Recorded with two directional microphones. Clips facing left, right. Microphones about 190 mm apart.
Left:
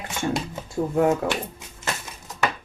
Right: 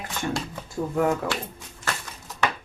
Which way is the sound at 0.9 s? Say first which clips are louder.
Left 3 dB; 20° left (ahead or behind).